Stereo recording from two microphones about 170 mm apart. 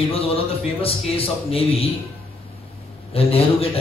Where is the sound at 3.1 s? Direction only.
35° left (ahead or behind).